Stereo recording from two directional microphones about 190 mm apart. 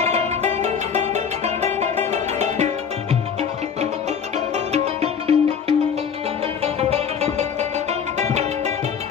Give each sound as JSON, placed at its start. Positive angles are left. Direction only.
{"t": 0.0, "sound": "music", "side_deg": -35}
{"t": 4.7, "sound": "music", "side_deg": -35}